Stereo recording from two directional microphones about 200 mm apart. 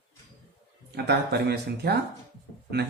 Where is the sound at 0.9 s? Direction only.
55° right (ahead or behind).